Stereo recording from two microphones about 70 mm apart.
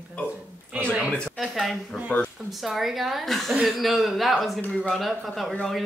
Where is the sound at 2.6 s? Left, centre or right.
Centre.